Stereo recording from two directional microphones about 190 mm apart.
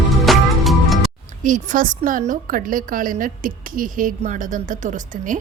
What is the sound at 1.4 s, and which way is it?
A woman's voice, 45° right (ahead or behind).